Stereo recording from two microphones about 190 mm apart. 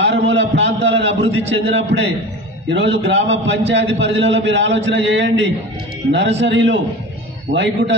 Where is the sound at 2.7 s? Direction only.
70° right (ahead or behind).